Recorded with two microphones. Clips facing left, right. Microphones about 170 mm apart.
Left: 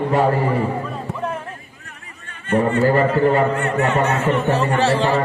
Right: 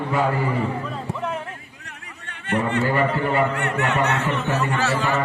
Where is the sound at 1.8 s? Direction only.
70° right (ahead or behind).